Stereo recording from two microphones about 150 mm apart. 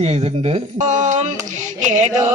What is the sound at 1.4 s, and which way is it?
Music, 55° right (ahead or behind).